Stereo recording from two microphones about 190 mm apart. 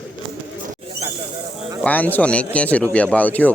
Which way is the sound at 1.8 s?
10° left (ahead or behind).